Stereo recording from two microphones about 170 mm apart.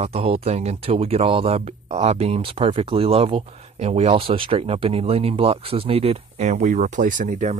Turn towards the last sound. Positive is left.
turn(degrees=-45)  # may be behind; listen again after turning